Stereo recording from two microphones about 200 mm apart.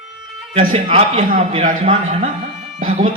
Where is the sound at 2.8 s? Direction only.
40° right (ahead or behind).